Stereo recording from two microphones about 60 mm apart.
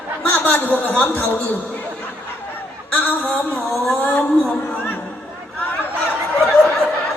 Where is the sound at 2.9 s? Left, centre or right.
Left.